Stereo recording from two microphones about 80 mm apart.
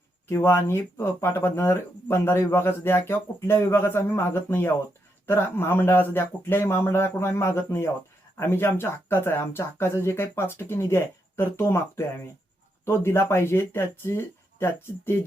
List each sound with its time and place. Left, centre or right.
0.3 s speech: left